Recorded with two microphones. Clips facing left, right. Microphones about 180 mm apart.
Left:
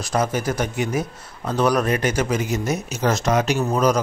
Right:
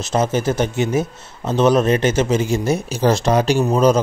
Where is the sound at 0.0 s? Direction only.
25° right (ahead or behind).